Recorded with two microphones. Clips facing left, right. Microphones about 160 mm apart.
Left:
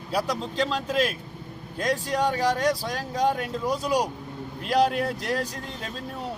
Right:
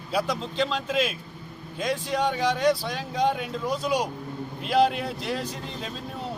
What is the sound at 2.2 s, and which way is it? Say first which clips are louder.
Speech: even; 5° left (ahead or behind).